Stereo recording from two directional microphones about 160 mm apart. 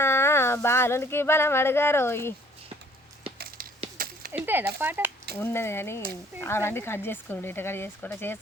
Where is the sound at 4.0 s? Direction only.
65° right (ahead or behind).